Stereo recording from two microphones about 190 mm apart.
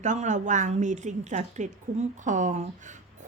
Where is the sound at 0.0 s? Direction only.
40° right (ahead or behind).